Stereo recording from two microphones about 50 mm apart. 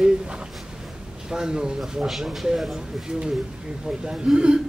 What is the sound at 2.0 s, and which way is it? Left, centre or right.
A man's voice, centre.